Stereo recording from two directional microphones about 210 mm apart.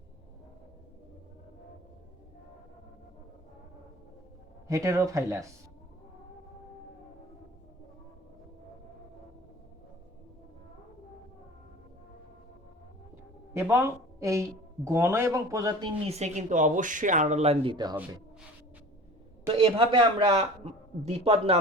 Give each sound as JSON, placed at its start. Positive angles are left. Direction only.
{"t": 4.7, "sound": "speech", "side_deg": -15}
{"t": 13.5, "sound": "a woman's voice", "side_deg": -10}
{"t": 16.0, "sound": "speech", "side_deg": -30}
{"t": 19.5, "sound": "speech", "side_deg": -25}